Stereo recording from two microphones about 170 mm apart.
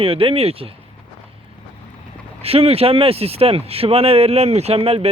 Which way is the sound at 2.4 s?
35° right (ahead or behind).